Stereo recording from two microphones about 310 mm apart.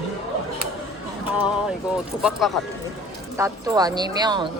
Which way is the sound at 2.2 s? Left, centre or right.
Centre.